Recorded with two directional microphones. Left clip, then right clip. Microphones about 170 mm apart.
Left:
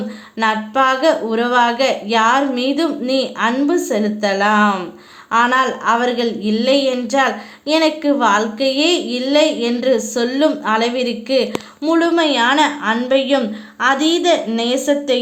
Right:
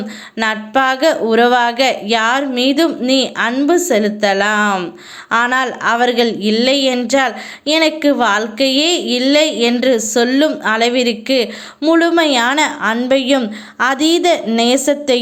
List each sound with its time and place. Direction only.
0.3 s a woman's voice: 25° right (ahead or behind)